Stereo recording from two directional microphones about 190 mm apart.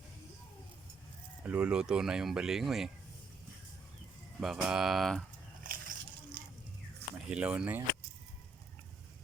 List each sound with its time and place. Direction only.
1.5 s speech: 5° right (ahead or behind)
4.4 s speech: centre (ahead or behind)
5.6 s a sound: 50° right (ahead or behind)
7.3 s speech: 5° right (ahead or behind)